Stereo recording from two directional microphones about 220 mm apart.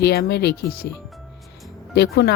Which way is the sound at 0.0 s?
50° left (ahead or behind).